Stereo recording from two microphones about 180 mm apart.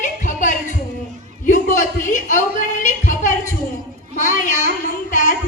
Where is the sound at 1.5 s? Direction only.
45° left (ahead or behind).